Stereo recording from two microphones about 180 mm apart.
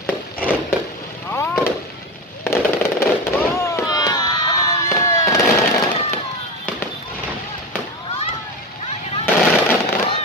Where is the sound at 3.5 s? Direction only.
15° left (ahead or behind).